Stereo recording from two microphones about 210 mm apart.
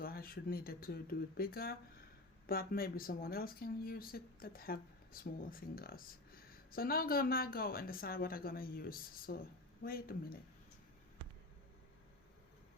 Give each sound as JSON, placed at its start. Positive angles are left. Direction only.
{"t": 0.0, "sound": "speech", "side_deg": 45}